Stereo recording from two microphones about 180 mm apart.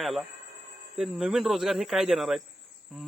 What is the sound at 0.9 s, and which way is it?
Speech, centre (ahead or behind).